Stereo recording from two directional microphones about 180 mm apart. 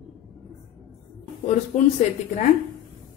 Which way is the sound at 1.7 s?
40° left (ahead or behind).